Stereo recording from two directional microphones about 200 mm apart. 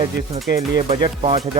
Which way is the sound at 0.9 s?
30° right (ahead or behind).